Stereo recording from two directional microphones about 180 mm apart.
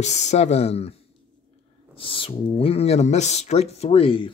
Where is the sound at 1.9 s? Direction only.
30° left (ahead or behind).